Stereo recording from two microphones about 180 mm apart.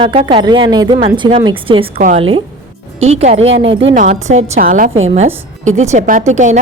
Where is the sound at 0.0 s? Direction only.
30° right (ahead or behind).